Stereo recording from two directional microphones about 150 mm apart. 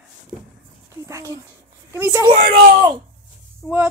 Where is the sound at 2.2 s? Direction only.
30° right (ahead or behind).